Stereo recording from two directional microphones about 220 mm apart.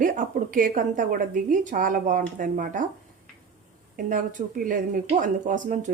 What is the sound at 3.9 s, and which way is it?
A woman's voice, 35° right (ahead or behind).